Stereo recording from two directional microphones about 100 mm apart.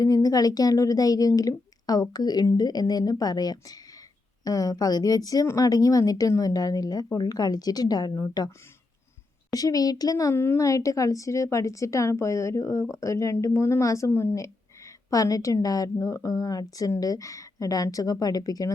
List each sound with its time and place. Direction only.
0.0 s a woman's voice: 40° left (ahead or behind)
9.5 s a woman's voice: 40° left (ahead or behind)
10.3 s a woman's voice: 25° left (ahead or behind)
10.6 s a woman's voice: 35° left (ahead or behind)